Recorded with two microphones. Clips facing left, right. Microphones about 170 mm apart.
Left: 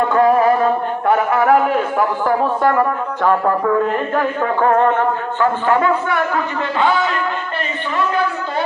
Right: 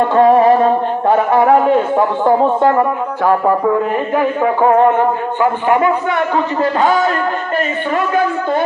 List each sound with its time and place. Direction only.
0.1 s speech: 30° right (ahead or behind)
3.2 s a man's voice: 10° right (ahead or behind)
6.3 s a man's voice: 40° right (ahead or behind)